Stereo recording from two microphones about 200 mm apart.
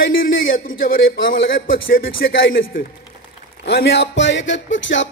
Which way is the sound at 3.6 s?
65° left (ahead or behind).